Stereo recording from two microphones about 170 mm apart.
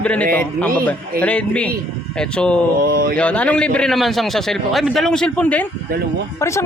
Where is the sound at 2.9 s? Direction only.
60° right (ahead or behind).